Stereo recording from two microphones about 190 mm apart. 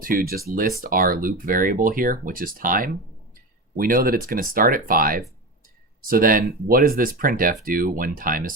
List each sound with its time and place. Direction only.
0.0 s speech: 50° right (ahead or behind)